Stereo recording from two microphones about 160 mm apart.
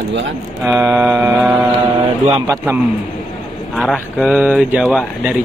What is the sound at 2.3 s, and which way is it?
Speech, 25° right (ahead or behind).